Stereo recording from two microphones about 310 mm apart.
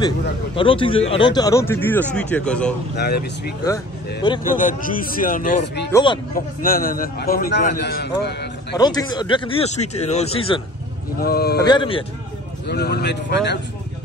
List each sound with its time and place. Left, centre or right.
0.6 s a man's voice: centre
3.0 s a man's voice: left
5.9 s a man's voice: centre
6.3 s a man's voice: left
8.7 s a man's voice: centre
11.1 s speech: left
11.6 s a man's voice: centre
12.6 s speech: left